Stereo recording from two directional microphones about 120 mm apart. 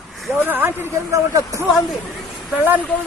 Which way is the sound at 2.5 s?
15° right (ahead or behind).